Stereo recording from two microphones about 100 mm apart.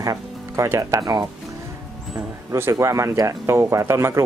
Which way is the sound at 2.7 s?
30° right (ahead or behind).